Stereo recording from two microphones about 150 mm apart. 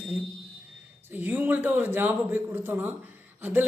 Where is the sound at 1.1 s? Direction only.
10° right (ahead or behind).